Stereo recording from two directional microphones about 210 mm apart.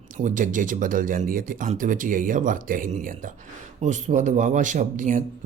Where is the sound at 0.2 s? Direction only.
35° right (ahead or behind).